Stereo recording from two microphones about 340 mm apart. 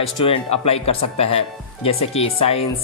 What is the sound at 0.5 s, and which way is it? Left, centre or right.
A man's voice, centre.